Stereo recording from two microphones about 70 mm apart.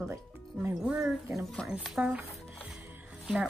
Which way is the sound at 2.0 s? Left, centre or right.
Centre.